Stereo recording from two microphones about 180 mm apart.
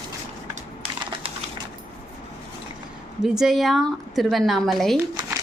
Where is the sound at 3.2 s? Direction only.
Centre (ahead or behind).